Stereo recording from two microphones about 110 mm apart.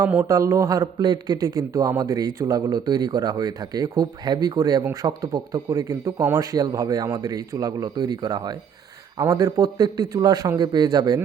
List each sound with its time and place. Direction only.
0.3 s a man's voice: 30° right (ahead or behind)